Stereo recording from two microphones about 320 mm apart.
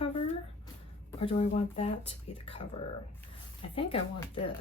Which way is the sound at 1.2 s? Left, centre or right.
Centre.